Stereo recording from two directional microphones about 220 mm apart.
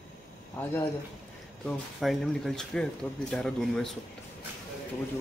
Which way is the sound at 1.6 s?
Centre (ahead or behind).